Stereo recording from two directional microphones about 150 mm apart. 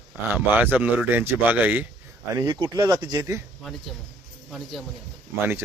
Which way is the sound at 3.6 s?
Centre (ahead or behind).